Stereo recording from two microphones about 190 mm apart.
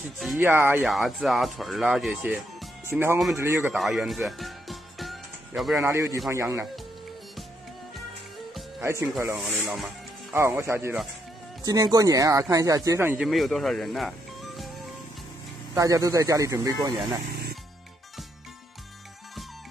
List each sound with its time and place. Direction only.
0.2 s speech: centre (ahead or behind)
0.5 s speech: 10° right (ahead or behind)
0.8 s speech: centre (ahead or behind)
3.7 s music: centre (ahead or behind)
5.8 s speech: 15° right (ahead or behind)
8.8 s speech: 15° right (ahead or behind)
9.4 s speech: centre (ahead or behind)
10.3 s speech: 15° right (ahead or behind)
15.7 s speech: 15° right (ahead or behind)